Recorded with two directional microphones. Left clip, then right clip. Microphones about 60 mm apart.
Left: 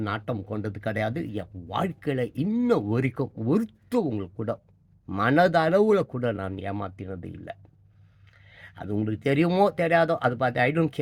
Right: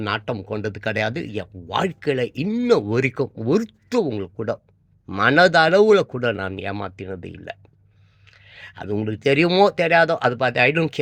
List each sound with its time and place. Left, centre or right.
0.0 s speech: centre
1.7 s speech: centre
8.3 s speech: centre